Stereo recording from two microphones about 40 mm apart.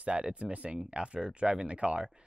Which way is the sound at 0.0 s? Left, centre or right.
Right.